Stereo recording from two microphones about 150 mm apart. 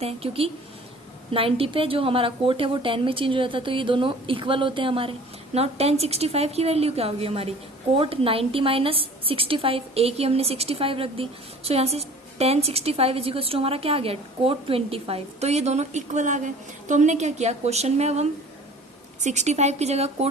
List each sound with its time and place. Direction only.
0.0 s a woman's voice: 40° right (ahead or behind)